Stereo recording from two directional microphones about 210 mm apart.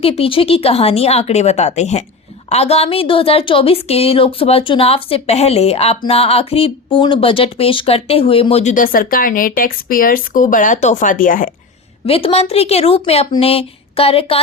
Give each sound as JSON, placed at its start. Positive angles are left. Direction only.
{"t": 0.0, "sound": "a woman's voice", "side_deg": 25}
{"t": 12.0, "sound": "a woman's voice", "side_deg": 25}